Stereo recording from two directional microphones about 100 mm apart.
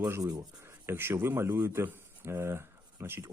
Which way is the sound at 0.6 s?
25° right (ahead or behind).